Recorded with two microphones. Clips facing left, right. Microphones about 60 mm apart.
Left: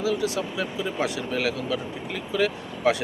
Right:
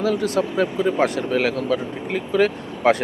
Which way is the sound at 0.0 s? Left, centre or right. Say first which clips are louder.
Right 5 dB; right.